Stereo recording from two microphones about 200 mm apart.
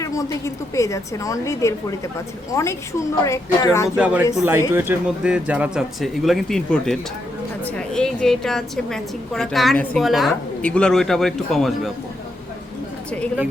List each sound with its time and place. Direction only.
0.0 s a woman's voice: 15° left (ahead or behind)
3.8 s a woman's voice: 5° right (ahead or behind)